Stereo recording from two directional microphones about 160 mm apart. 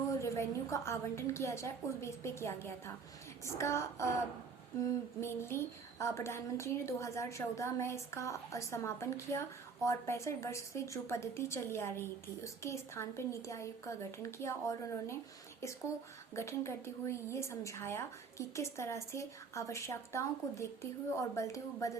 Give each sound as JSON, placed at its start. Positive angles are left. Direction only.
{"t": 0.2, "sound": "a woman's voice", "side_deg": 20}
{"t": 5.2, "sound": "a woman's voice", "side_deg": 15}
{"t": 16.3, "sound": "a woman's voice", "side_deg": 15}